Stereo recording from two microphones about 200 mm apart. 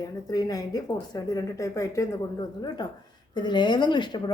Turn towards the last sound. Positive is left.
turn(degrees=20)  # may be behind; listen again after turning